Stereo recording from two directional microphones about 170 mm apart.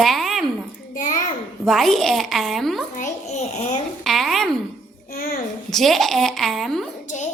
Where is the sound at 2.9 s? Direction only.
45° left (ahead or behind).